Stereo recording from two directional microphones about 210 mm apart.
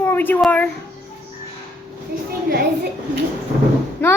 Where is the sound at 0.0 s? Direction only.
10° left (ahead or behind).